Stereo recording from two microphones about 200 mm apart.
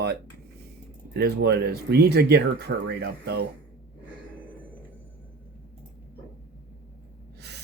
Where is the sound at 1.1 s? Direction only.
55° right (ahead or behind).